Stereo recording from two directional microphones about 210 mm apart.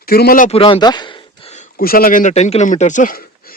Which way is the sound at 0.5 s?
25° left (ahead or behind).